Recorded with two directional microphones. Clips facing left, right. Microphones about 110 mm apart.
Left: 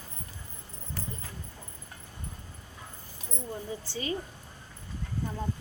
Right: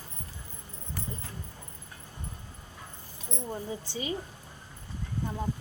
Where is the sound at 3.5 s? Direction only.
20° right (ahead or behind).